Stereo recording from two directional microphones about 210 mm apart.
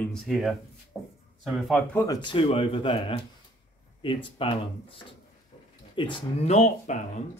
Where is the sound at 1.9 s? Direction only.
15° left (ahead or behind).